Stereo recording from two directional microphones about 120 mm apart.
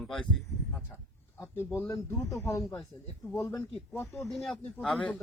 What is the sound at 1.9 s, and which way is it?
Speech, 25° left (ahead or behind).